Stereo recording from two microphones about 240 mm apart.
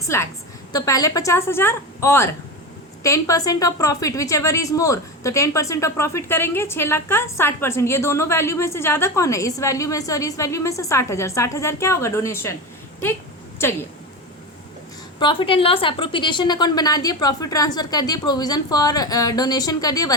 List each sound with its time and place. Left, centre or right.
0.1 s a woman's voice: centre
15.2 s a woman's voice: centre